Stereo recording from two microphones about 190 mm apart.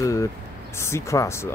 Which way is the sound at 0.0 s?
15° left (ahead or behind).